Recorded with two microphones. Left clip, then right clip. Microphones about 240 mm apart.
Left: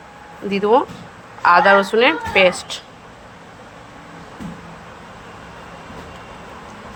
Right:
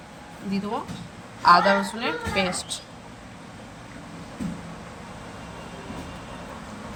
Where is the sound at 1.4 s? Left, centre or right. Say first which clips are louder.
Left 6 dB; left.